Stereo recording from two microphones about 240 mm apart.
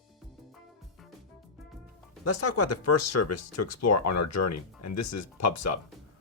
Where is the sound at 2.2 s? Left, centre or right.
Left.